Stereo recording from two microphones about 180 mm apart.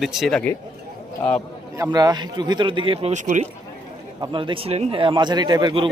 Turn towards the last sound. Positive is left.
turn(degrees=-25)  # may be behind; listen again after turning